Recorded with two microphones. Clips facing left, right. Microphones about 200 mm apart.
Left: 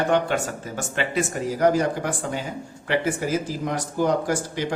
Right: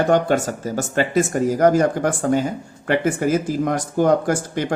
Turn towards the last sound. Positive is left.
turn(degrees=-50)  # may be behind; listen again after turning